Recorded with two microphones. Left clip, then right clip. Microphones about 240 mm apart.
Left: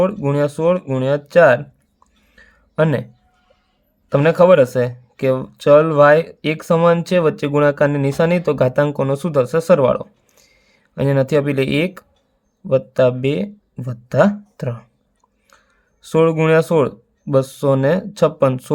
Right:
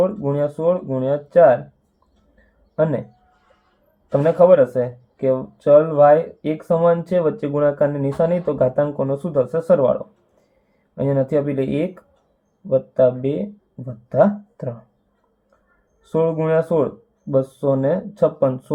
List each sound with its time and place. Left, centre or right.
0.0 s speech: left
2.7 s speech: left
4.1 s speech: left
16.0 s speech: left